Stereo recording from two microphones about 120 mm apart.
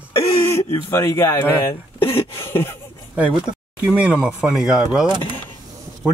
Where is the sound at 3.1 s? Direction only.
10° right (ahead or behind).